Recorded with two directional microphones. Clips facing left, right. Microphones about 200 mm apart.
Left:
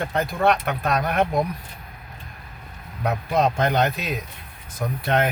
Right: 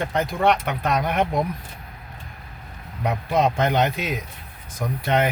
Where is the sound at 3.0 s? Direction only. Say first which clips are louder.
Even; centre (ahead or behind).